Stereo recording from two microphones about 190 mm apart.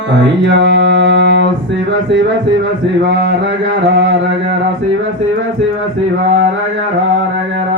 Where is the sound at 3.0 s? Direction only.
70° right (ahead or behind).